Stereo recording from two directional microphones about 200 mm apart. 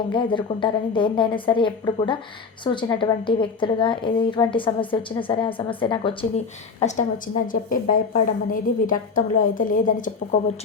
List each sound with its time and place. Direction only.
0.1 s a woman's voice: 25° left (ahead or behind)
6.8 s a woman's voice: 40° left (ahead or behind)